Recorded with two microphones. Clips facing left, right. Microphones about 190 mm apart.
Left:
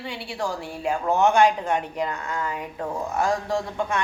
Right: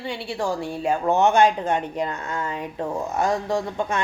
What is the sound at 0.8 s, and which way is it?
A woman's voice, 25° right (ahead or behind).